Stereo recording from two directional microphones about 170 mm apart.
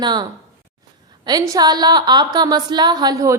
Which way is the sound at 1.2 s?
25° right (ahead or behind).